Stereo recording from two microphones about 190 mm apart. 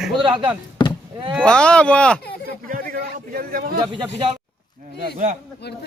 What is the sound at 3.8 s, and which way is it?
Speech, 25° right (ahead or behind).